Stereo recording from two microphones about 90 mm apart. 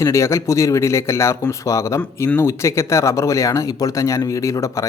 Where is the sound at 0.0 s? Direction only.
35° left (ahead or behind).